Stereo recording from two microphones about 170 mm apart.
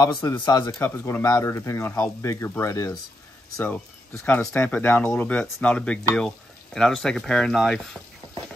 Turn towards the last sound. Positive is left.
turn(degrees=0)  # may be behind; listen again after turning